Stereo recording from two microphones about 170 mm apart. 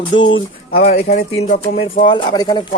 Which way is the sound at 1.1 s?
40° left (ahead or behind).